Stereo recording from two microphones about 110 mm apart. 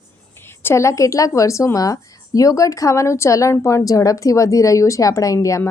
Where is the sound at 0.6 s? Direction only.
25° left (ahead or behind).